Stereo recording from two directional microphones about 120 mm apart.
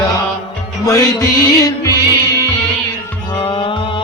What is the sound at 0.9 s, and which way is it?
Music, 30° left (ahead or behind).